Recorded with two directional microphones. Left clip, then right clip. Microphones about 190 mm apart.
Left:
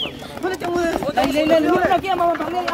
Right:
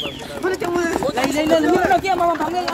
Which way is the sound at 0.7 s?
45° left (ahead or behind).